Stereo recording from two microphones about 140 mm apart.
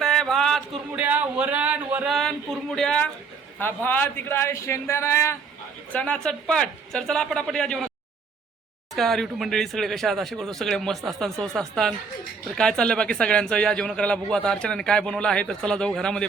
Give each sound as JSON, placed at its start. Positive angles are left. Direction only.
{"t": 0.0, "sound": "a sound", "side_deg": 0}
{"t": 0.9, "sound": "speech", "side_deg": -10}
{"t": 2.0, "sound": "a man's voice", "side_deg": 0}
{"t": 5.9, "sound": "speech", "side_deg": 10}
{"t": 9.0, "sound": "a man's voice", "side_deg": 0}